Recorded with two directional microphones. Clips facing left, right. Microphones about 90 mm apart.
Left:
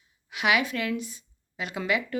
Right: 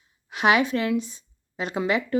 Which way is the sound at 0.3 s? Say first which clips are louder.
Right 5 dB; 35° right (ahead or behind).